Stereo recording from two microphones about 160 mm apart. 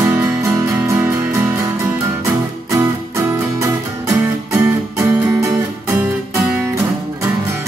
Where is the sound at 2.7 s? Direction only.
20° right (ahead or behind).